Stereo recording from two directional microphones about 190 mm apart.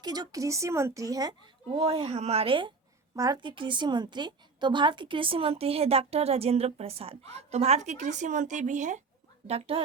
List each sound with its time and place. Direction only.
0.0 s a woman's voice: 20° right (ahead or behind)
1.8 s a woman's voice: 30° right (ahead or behind)